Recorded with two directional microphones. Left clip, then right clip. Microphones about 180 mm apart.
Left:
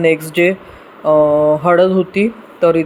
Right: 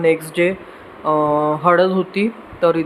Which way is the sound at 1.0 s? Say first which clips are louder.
Left 6 dB; 5° left (ahead or behind).